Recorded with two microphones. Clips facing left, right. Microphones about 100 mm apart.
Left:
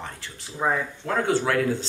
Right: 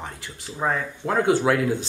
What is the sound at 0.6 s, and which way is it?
Speech, 5° left (ahead or behind).